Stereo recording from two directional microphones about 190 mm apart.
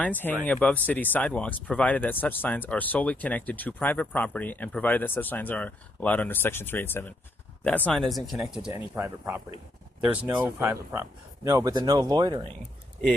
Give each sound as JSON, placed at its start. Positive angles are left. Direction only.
{"t": 0.0, "sound": "speech", "side_deg": 10}